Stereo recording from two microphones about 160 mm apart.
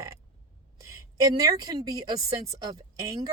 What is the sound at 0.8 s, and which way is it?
A woman's voice, 20° right (ahead or behind).